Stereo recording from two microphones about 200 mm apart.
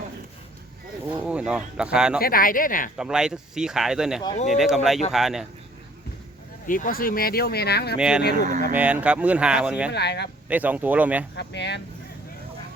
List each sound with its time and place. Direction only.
1.1 s speech: 5° right (ahead or behind)
2.2 s speech: 45° left (ahead or behind)
3.0 s speech: 5° right (ahead or behind)
6.7 s speech: 45° left (ahead or behind)
7.9 s speech: 5° right (ahead or behind)
8.4 s speech: 40° right (ahead or behind)
8.7 s speech: 5° right (ahead or behind)
9.9 s speech: 55° left (ahead or behind)
10.5 s speech: 10° right (ahead or behind)
11.3 s speech: 60° left (ahead or behind)